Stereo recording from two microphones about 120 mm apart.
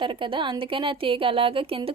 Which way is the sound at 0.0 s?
45° right (ahead or behind).